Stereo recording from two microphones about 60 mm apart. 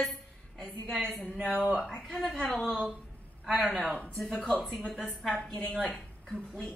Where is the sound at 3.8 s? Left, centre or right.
Left.